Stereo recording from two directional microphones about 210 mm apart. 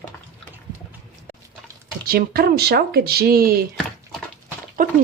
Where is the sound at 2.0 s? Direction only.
45° right (ahead or behind).